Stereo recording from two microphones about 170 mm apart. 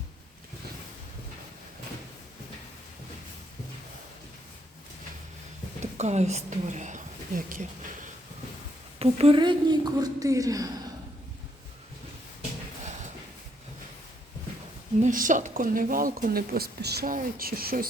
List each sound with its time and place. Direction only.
5.8 s speech: 40° right (ahead or behind)
9.0 s a woman's voice: 35° right (ahead or behind); by 10.7 s 20° right (ahead or behind)
15.0 s speech: 50° right (ahead or behind)